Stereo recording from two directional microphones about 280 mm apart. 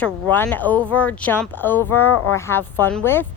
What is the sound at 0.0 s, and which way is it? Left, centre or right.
Speech, centre.